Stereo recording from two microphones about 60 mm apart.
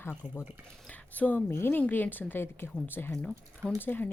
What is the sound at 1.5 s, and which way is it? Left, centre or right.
A woman's voice, left.